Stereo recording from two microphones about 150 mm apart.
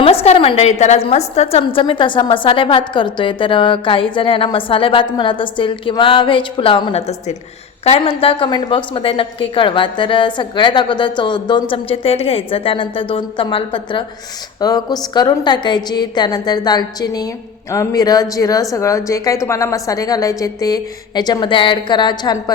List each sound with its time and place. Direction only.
0.0 s a woman's voice: 40° left (ahead or behind)